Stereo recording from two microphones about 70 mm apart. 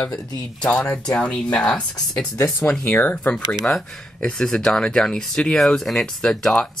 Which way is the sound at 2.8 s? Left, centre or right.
Left.